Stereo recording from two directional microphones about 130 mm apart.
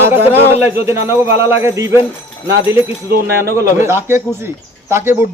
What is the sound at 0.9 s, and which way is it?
Speech, 20° right (ahead or behind).